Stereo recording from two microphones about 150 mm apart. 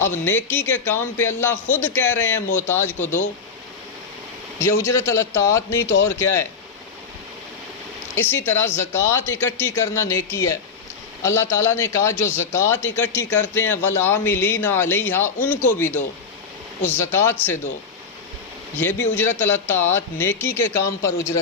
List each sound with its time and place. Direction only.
0.1 s a man's voice: 15° left (ahead or behind)
3.0 s speech: 55° left (ahead or behind)
4.6 s a man's voice: 15° left (ahead or behind)
8.1 s a man's voice: 15° left (ahead or behind)
16.8 s a man's voice: 15° left (ahead or behind)
18.8 s a man's voice: 15° left (ahead or behind)